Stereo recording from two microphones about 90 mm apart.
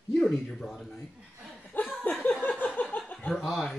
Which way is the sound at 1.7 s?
20° left (ahead or behind).